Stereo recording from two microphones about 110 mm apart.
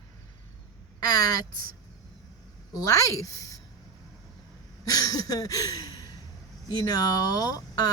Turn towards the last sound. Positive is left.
turn(degrees=35)  # may be behind; listen again after turning